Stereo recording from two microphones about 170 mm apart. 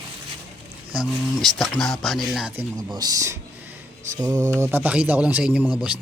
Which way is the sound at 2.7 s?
20° right (ahead or behind).